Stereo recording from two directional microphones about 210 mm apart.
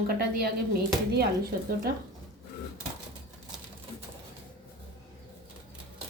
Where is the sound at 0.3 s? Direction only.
45° right (ahead or behind).